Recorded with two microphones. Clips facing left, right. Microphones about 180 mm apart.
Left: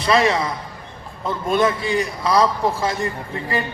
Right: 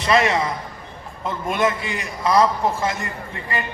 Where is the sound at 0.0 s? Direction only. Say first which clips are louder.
Left 1 dB; 35° left (ahead or behind).